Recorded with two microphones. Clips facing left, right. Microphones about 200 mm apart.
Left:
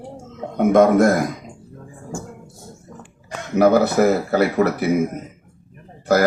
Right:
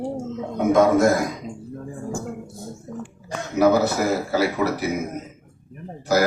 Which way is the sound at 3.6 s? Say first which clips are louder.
Left 3 dB; 60° left (ahead or behind).